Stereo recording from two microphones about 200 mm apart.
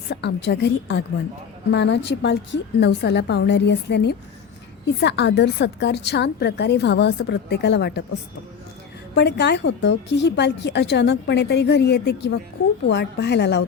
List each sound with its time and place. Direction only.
0.1 s speech: 55° left (ahead or behind)
9.1 s speech: 60° left (ahead or behind)